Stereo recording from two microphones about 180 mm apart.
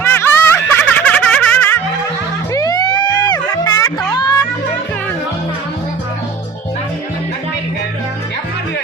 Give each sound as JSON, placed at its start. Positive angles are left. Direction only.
{"t": 0.0, "sound": "snicker", "side_deg": 10}
{"t": 2.5, "sound": "music", "side_deg": 20}